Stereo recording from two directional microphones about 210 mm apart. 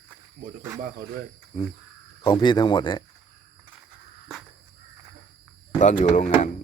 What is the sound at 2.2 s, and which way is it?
Speech, 25° left (ahead or behind).